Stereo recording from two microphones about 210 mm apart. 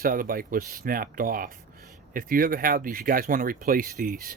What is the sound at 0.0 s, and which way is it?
Speech, 40° right (ahead or behind).